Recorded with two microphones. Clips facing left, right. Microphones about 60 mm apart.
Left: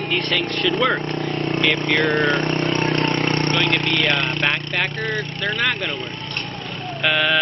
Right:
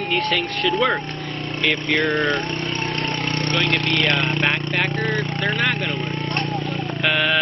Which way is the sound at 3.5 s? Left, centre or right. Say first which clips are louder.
Left 1 dB; centre.